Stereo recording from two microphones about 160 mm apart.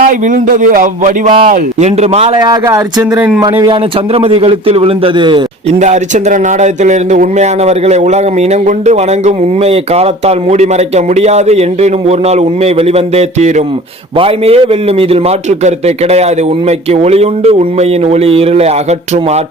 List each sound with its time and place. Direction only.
0.0 s speech: 55° right (ahead or behind)
1.8 s a man's voice: 40° right (ahead or behind)
2.4 s speech: 20° right (ahead or behind)
3.4 s speech: 25° right (ahead or behind)
4.1 s a man's voice: 40° right (ahead or behind)
5.8 s a man's voice: 50° right (ahead or behind)